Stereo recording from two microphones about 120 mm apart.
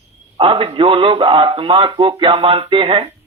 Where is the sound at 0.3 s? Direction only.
45° right (ahead or behind).